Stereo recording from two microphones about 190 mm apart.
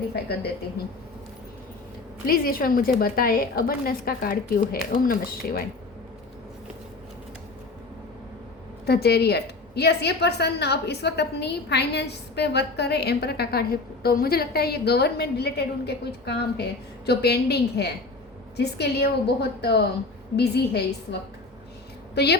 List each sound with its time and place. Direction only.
2.2 s speech: 50° left (ahead or behind)
8.9 s a woman's voice: 60° left (ahead or behind)